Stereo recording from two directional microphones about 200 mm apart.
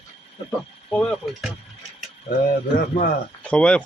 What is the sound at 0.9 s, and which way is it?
Speech, 5° left (ahead or behind).